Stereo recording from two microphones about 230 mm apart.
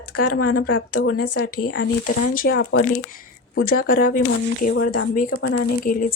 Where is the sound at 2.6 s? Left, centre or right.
Left.